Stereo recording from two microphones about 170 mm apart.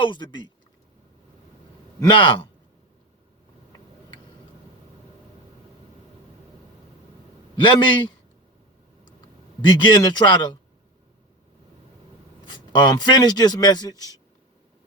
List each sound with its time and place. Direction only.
0.0 s speech: 25° left (ahead or behind)
2.0 s speech: 30° left (ahead or behind)
7.5 s a man's voice: 30° left (ahead or behind)
9.6 s speech: 30° left (ahead or behind)
12.5 s speech: 25° left (ahead or behind)